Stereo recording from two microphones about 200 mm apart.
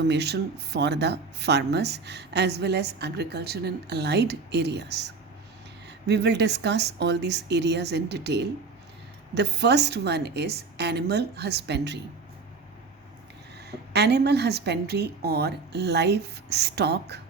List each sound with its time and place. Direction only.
0.1 s speech: 55° right (ahead or behind)
13.7 s speech: 55° right (ahead or behind)